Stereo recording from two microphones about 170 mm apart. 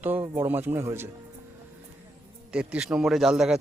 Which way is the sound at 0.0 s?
15° right (ahead or behind).